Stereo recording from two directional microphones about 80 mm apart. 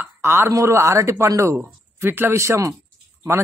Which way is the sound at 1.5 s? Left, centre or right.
Right.